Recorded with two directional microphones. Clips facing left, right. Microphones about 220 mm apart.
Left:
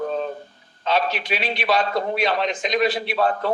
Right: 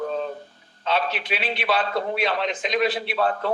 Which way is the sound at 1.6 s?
40° left (ahead or behind).